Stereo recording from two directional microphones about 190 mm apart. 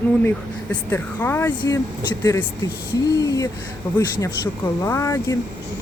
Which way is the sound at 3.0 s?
20° left (ahead or behind).